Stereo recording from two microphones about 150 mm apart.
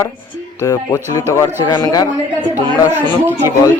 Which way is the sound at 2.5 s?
15° right (ahead or behind).